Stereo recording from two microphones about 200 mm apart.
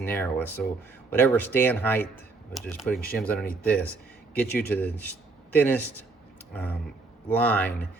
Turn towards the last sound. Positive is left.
turn(degrees=10)  # may be behind; listen again after turning